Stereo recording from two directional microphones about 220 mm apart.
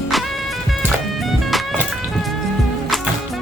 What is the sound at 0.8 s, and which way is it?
Music, centre (ahead or behind).